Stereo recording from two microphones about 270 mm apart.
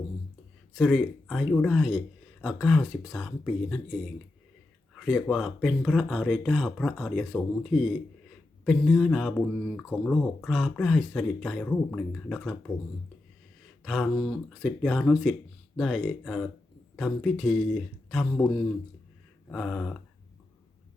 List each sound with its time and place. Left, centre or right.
0.8 s speech: centre
13.8 s speech: centre